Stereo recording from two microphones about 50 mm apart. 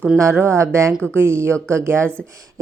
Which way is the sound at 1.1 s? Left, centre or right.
Right.